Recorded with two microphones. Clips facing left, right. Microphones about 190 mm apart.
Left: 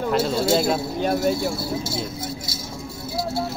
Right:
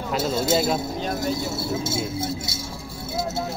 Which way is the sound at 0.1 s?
Centre (ahead or behind).